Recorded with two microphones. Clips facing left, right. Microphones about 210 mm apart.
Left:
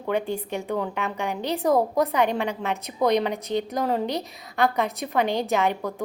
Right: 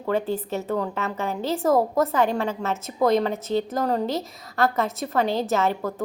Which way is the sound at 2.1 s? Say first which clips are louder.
Right 1 dB; 15° left (ahead or behind).